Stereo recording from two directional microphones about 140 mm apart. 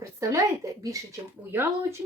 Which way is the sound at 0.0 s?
20° right (ahead or behind).